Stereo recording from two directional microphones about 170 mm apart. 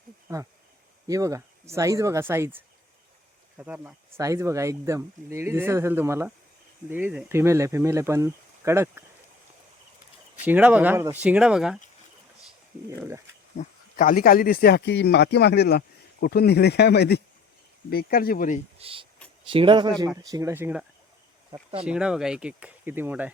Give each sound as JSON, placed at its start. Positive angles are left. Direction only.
{"t": 1.0, "sound": "speech", "side_deg": -20}
{"t": 10.4, "sound": "speech", "side_deg": -10}
{"t": 13.6, "sound": "speech", "side_deg": 45}
{"t": 13.9, "sound": "speech", "side_deg": 55}
{"t": 17.9, "sound": "speech", "side_deg": 60}
{"t": 18.8, "sound": "speech", "side_deg": -35}
{"t": 20.3, "sound": "speech", "side_deg": -15}
{"t": 21.5, "sound": "speech", "side_deg": -35}
{"t": 21.8, "sound": "speech", "side_deg": -5}